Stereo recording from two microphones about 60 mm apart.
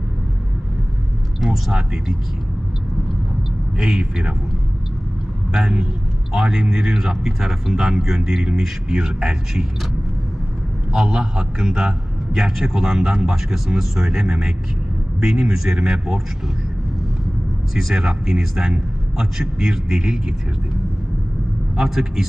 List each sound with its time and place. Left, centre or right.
1.4 s speech: centre
3.7 s speech: centre
5.5 s speech: centre
10.9 s speech: centre
17.7 s speech: centre
21.7 s a man's voice: centre